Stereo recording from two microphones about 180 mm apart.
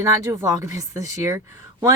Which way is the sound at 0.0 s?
15° right (ahead or behind).